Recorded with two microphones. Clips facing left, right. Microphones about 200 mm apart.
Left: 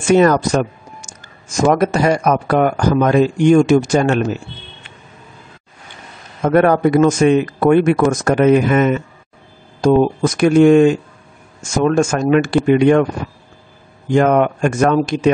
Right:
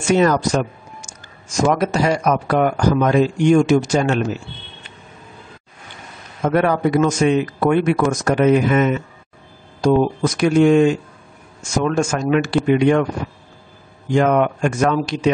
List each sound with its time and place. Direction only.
0.0 s speech: 55° left (ahead or behind)
6.4 s speech: 50° left (ahead or behind)
14.1 s speech: 50° left (ahead or behind)